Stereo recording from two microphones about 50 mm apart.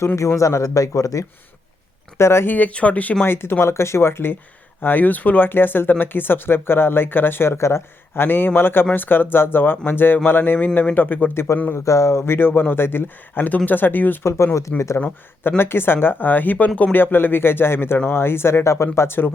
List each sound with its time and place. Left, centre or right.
0.2 s speech: left
2.1 s speech: left
2.5 s speech: left
3.2 s speech: left
4.8 s speech: left
11.7 s speech: left
12.2 s speech: left
14.3 s speech: left
15.4 s speech: left
17.0 s speech: left
18.6 s speech: left